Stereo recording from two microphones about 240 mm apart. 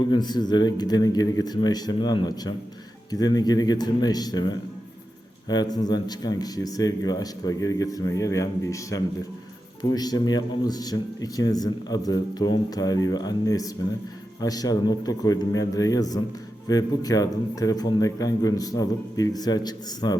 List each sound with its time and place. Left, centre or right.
0.0 s a man's voice: centre